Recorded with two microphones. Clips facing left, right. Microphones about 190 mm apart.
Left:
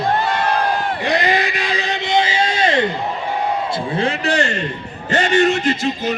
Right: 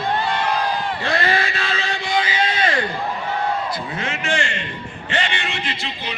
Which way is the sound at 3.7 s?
30° left (ahead or behind).